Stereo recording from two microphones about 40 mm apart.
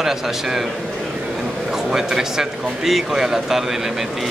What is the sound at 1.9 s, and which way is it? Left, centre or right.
Speech, centre.